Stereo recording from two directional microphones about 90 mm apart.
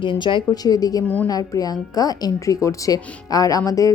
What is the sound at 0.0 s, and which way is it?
Speech, 60° left (ahead or behind).